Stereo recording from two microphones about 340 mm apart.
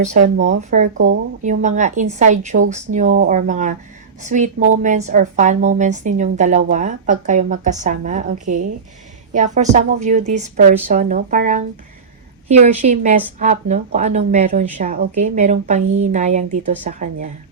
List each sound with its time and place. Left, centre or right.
0.0 s a woman's voice: right
0.9 s a woman's voice: right
1.4 s a woman's voice: right